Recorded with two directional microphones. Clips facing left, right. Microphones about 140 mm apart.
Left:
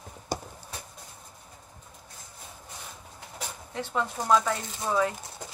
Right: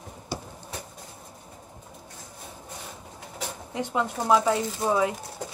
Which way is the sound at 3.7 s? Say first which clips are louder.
Right 3 dB; 15° right (ahead or behind).